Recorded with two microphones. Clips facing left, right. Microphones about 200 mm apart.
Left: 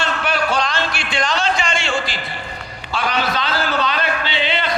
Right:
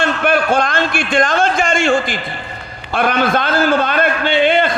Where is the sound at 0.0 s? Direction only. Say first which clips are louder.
Right 6 dB; 55° right (ahead or behind).